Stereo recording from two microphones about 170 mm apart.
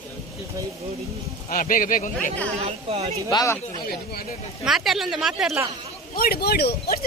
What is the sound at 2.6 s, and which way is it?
Speech, 35° right (ahead or behind).